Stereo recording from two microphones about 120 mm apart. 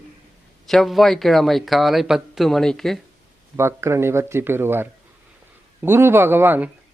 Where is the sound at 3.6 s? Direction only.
20° right (ahead or behind).